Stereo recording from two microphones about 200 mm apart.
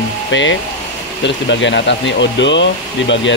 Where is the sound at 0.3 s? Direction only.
65° left (ahead or behind).